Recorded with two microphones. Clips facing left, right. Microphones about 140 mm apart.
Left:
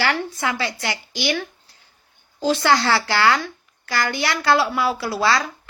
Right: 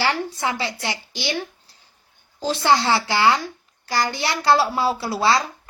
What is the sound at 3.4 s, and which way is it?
A woman's voice, 30° right (ahead or behind).